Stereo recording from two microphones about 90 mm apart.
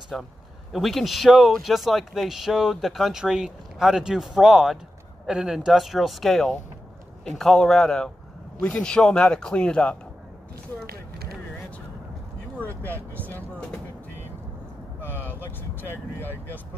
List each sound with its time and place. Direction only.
0.1 s a man's voice: centre (ahead or behind)
12.5 s vehicle: 20° left (ahead or behind)
15.0 s vehicle: 25° left (ahead or behind)
16.2 s speech: 25° left (ahead or behind)